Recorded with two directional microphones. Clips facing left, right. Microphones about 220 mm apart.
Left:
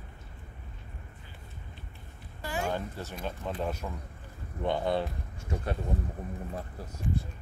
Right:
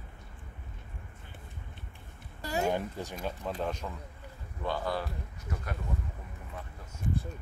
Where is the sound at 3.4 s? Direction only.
Centre (ahead or behind).